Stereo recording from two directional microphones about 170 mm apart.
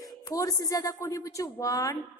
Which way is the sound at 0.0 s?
20° left (ahead or behind).